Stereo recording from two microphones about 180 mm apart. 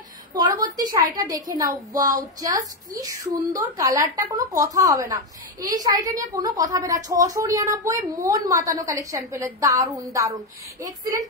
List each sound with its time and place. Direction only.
0.6 s a woman's voice: 20° right (ahead or behind)